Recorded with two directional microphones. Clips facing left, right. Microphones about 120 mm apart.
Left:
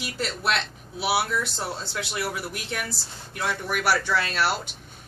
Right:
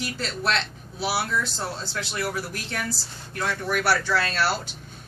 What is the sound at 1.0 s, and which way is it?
Speech, 15° left (ahead or behind).